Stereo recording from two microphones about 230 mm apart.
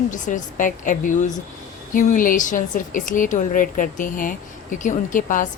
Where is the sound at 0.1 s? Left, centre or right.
Left.